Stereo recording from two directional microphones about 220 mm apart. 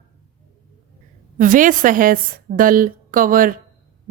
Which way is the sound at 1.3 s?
35° right (ahead or behind).